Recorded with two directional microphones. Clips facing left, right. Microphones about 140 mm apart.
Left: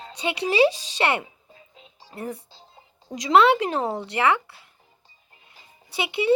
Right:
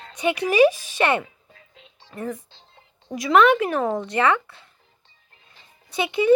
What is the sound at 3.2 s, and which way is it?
Speech, 20° left (ahead or behind).